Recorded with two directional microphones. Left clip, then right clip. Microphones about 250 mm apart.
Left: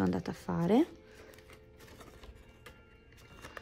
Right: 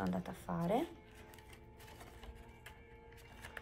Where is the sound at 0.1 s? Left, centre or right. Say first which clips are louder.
Left 6 dB; left.